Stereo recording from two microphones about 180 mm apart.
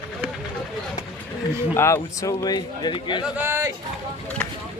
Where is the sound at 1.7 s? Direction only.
15° left (ahead or behind).